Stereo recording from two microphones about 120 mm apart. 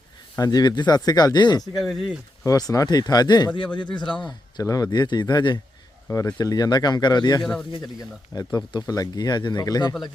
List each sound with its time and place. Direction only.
0.3 s speech: 30° left (ahead or behind)
1.7 s speech: centre (ahead or behind)
2.4 s speech: 30° left (ahead or behind)
4.6 s speech: 30° left (ahead or behind)